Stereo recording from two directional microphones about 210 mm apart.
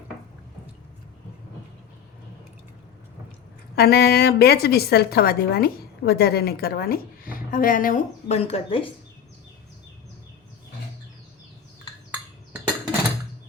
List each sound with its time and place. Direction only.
3.8 s a woman's voice: 50° left (ahead or behind)
8.4 s speech: 30° left (ahead or behind)